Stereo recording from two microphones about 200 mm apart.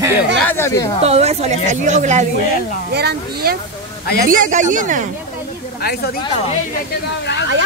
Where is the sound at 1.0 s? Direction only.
30° right (ahead or behind).